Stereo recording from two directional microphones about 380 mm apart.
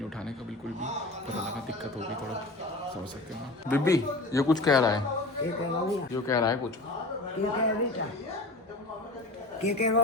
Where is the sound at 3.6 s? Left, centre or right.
Centre.